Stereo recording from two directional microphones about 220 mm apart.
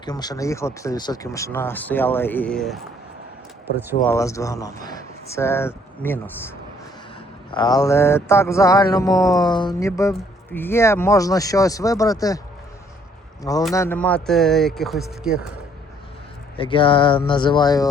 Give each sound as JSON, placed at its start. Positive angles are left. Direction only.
{"t": 0.0, "sound": "mantra", "side_deg": 20}
{"t": 4.0, "sound": "mantra", "side_deg": 15}
{"t": 7.5, "sound": "mantra", "side_deg": 20}
{"t": 13.4, "sound": "mantra", "side_deg": 15}
{"t": 13.7, "sound": "speech", "side_deg": 10}
{"t": 16.6, "sound": "speech", "side_deg": 25}